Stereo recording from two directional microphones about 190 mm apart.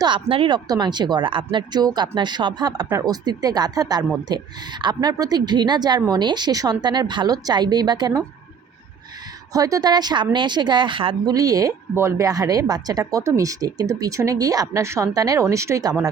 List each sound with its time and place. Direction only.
0.0 s speech: 25° right (ahead or behind)
9.5 s speech: 20° right (ahead or behind)